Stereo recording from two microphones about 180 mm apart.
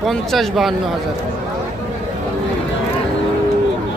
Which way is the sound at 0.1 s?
Centre (ahead or behind).